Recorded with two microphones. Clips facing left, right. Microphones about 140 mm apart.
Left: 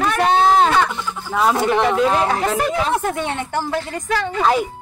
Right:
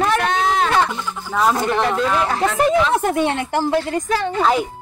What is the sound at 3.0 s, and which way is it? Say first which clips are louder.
Speech: right 4 dB; 20° right (ahead or behind).